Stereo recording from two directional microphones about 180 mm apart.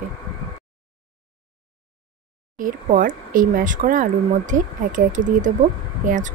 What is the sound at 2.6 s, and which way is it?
Speech, 50° right (ahead or behind).